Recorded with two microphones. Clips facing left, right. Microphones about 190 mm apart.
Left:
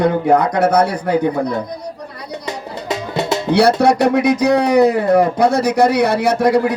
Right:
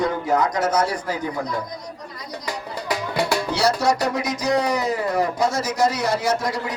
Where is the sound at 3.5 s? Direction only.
60° left (ahead or behind).